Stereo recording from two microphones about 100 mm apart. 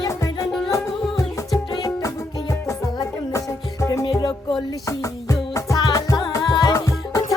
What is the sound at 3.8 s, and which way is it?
Music, 30° left (ahead or behind).